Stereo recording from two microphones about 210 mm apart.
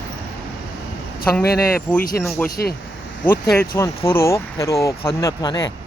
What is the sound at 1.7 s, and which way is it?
Speech, 5° left (ahead or behind).